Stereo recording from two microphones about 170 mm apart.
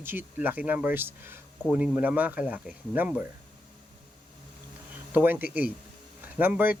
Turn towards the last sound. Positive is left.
turn(degrees=-10)  # may be behind; listen again after turning